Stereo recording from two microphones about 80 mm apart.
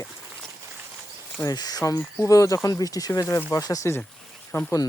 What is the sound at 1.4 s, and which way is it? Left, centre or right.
Speech, left.